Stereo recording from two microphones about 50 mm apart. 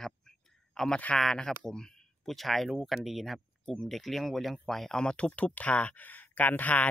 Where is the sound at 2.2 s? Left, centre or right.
Centre.